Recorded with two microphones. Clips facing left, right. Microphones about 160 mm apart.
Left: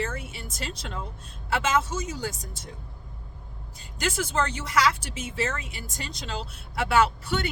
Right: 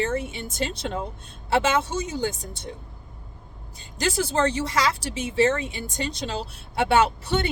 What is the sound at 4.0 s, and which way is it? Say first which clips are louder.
Speech: right 4 dB; 35° right (ahead or behind).